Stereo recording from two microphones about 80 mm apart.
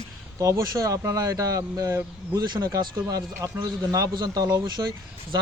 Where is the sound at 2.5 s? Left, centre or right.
Right.